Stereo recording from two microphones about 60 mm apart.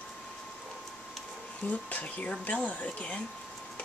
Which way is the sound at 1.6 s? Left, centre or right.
Left.